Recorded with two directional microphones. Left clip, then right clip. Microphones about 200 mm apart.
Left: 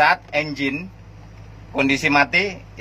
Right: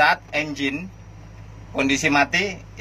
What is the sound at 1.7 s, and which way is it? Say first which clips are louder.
Speech: left 2 dB; 30° left (ahead or behind).